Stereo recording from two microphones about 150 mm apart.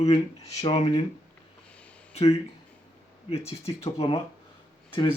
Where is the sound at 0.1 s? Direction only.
40° left (ahead or behind).